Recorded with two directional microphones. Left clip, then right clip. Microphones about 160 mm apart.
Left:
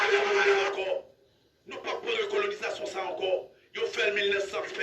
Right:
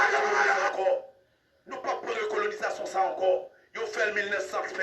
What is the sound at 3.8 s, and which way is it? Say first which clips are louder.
A man's voice: left 1 dB; 20° right (ahead or behind).